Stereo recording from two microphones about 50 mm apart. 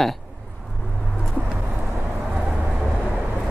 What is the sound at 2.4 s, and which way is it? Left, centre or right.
Vehicle, centre.